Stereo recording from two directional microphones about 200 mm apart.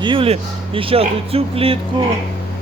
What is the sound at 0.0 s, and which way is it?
Speech, 25° right (ahead or behind).